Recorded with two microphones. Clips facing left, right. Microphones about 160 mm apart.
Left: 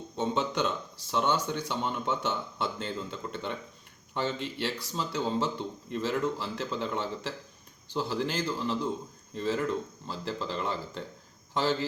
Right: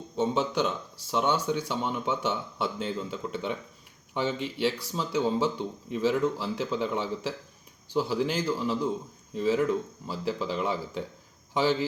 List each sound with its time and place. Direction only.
0.2 s speech: 5° right (ahead or behind)